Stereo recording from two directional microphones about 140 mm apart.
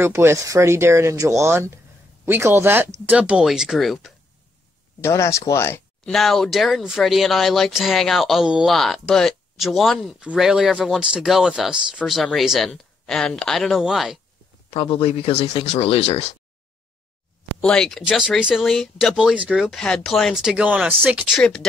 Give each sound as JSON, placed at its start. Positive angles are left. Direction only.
{"t": 0.0, "sound": "speech", "side_deg": -20}
{"t": 5.0, "sound": "speech", "side_deg": 20}
{"t": 6.0, "sound": "speech", "side_deg": 0}
{"t": 14.7, "sound": "speech", "side_deg": 40}
{"t": 17.6, "sound": "speech", "side_deg": 5}
{"t": 21.4, "sound": "speech", "side_deg": 5}